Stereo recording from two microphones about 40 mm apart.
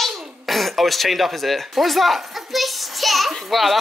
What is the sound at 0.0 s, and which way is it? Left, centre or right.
Speech, centre.